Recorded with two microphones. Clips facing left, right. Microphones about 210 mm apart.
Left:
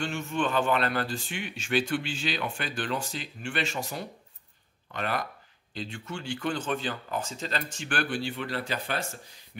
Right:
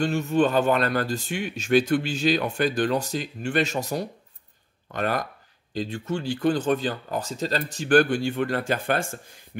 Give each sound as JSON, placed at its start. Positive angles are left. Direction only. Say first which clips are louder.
{"t": 0.0, "sound": "speech", "louder": "right 8 dB", "side_deg": -40}